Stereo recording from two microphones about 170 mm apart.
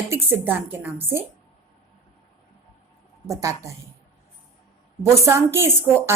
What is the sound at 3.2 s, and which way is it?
Speech, 20° right (ahead or behind).